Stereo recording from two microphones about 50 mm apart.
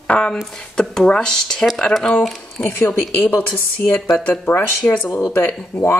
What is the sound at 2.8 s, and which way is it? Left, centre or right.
A woman's voice, left.